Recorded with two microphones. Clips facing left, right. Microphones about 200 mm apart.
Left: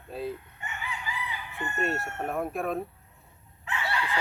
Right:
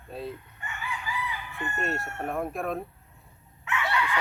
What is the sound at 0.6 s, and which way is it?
Chicken, 20° left (ahead or behind).